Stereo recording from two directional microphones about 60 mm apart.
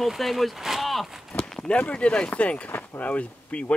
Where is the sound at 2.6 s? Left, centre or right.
Left.